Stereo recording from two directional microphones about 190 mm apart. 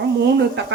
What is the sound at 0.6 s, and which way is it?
Speech, 65° right (ahead or behind).